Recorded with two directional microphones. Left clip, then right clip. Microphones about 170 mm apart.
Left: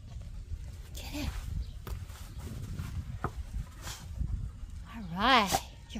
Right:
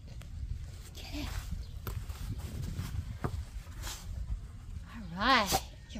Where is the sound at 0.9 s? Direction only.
45° left (ahead or behind).